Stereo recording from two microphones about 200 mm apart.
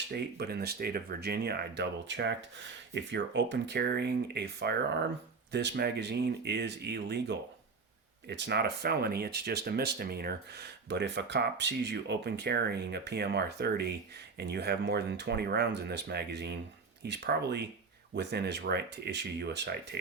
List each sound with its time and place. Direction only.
0.1 s speech: 55° right (ahead or behind)